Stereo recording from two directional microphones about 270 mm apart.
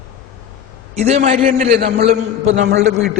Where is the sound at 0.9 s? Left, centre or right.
Right.